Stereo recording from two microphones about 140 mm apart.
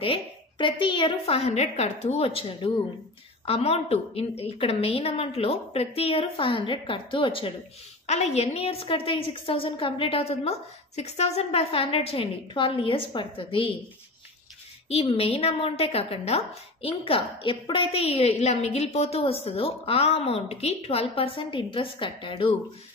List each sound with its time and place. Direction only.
0.0 s a woman's voice: 40° left (ahead or behind)
8.1 s a woman's voice: 50° left (ahead or behind)
14.9 s a woman's voice: 45° left (ahead or behind)